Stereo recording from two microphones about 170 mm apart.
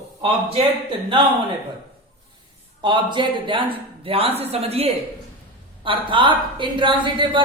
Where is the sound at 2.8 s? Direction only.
30° right (ahead or behind).